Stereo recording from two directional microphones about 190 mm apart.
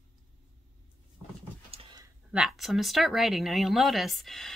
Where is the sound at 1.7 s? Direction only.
25° right (ahead or behind).